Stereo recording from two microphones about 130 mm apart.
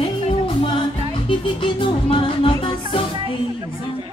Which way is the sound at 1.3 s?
40° left (ahead or behind).